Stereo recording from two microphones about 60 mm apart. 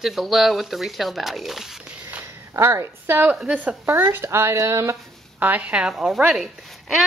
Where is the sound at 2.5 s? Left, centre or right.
Right.